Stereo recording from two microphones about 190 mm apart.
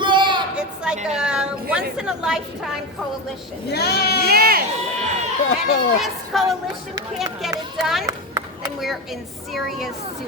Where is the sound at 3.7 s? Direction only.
60° left (ahead or behind).